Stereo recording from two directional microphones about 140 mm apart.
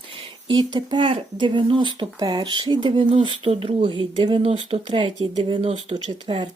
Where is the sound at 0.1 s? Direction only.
40° right (ahead or behind).